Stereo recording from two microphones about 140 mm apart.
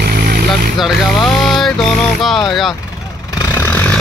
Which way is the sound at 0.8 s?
Centre (ahead or behind).